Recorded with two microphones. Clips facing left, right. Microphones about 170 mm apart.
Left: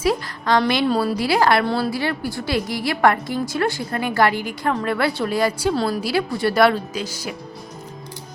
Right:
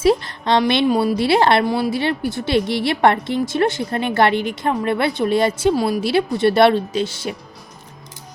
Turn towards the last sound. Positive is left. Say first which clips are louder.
# right 5 dB
turn(degrees=-25)  # may be behind; listen again after turning